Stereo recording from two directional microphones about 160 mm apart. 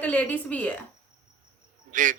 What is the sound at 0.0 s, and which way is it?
Speech, 10° left (ahead or behind).